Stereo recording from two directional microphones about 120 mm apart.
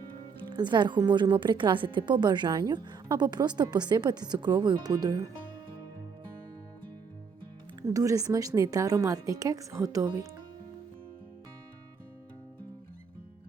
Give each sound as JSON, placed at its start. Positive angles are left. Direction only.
{"t": 0.4, "sound": "a woman's voice", "side_deg": -40}
{"t": 7.8, "sound": "a woman's voice", "side_deg": -30}